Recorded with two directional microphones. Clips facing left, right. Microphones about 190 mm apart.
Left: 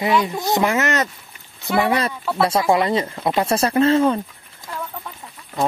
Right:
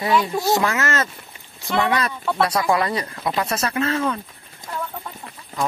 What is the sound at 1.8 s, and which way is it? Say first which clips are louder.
Speech: left 2 dB; 30° left (ahead or behind).